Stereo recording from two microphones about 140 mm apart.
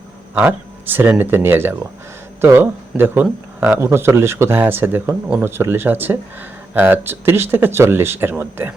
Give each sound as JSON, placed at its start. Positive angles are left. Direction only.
{"t": 0.3, "sound": "speech", "side_deg": -15}